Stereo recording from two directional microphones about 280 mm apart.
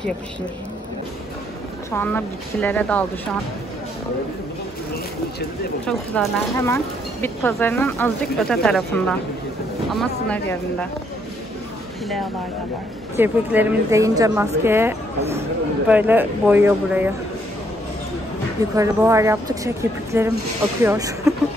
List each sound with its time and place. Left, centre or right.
1.9 s speech: centre
5.9 s speech: centre
13.1 s a woman's voice: centre
18.6 s a woman's voice: centre